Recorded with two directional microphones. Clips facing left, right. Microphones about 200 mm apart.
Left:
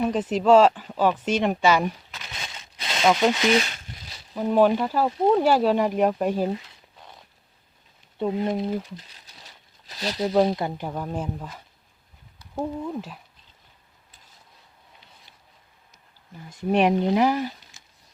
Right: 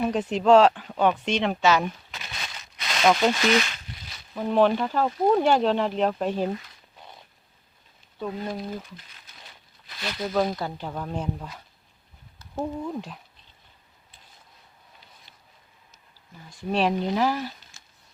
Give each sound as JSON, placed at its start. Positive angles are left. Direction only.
{"t": 0.0, "sound": "speech", "side_deg": 5}
{"t": 2.4, "sound": "a sound", "side_deg": 25}
{"t": 3.0, "sound": "speech", "side_deg": 5}
{"t": 3.3, "sound": "speech", "side_deg": 20}
{"t": 4.4, "sound": "speech", "side_deg": 10}
{"t": 8.2, "sound": "speech", "side_deg": 20}
{"t": 10.8, "sound": "speech", "side_deg": 10}
{"t": 16.5, "sound": "speech", "side_deg": 20}